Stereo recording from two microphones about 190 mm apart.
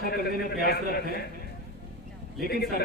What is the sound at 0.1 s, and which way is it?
A man's voice, 55° left (ahead or behind).